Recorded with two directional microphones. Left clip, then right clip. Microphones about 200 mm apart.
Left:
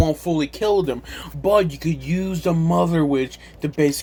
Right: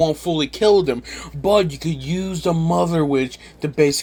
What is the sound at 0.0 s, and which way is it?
Speech, 25° right (ahead or behind).